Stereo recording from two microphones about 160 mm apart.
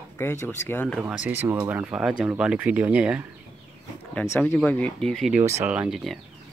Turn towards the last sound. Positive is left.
turn(degrees=0)  # may be behind; listen again after turning